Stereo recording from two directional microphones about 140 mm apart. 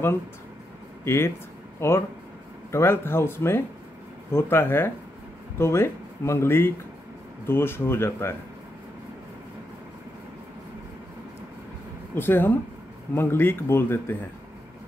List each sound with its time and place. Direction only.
1.0 s speech: 20° left (ahead or behind)
12.2 s speech: 15° left (ahead or behind)